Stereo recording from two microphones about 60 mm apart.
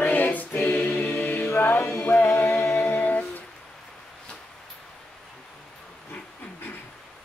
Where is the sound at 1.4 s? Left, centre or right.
Left.